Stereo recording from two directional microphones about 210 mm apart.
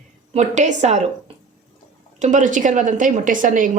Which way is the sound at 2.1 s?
35° right (ahead or behind).